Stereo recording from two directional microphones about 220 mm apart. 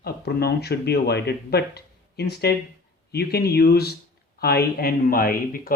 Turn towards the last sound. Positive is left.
turn(degrees=40)  # may be behind; listen again after turning